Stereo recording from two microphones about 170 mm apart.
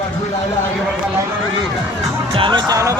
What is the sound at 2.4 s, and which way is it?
Music, 25° right (ahead or behind).